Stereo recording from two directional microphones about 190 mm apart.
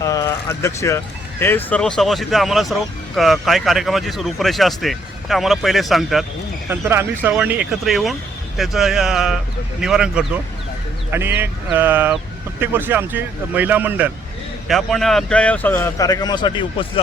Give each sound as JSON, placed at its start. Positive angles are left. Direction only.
{"t": 0.0, "sound": "a sound", "side_deg": 20}
{"t": 1.4, "sound": "speech", "side_deg": 10}
{"t": 6.7, "sound": "speech", "side_deg": -10}